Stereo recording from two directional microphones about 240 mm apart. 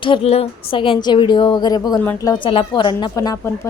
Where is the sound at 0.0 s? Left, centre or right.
Left.